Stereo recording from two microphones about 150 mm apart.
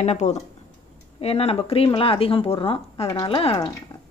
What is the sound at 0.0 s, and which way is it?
Speech, 50° left (ahead or behind).